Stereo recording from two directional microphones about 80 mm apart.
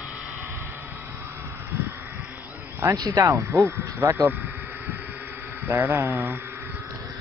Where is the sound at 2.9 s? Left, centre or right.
Right.